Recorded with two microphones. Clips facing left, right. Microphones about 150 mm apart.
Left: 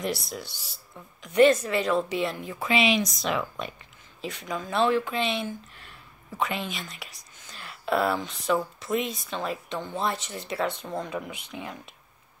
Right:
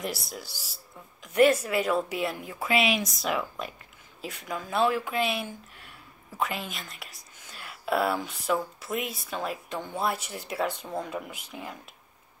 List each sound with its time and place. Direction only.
0.0 s speech: 5° right (ahead or behind)